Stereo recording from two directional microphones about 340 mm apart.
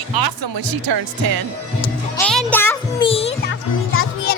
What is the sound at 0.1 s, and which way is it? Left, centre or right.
Speech, right.